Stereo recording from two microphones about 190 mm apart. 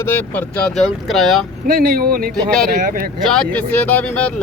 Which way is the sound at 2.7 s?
50° right (ahead or behind).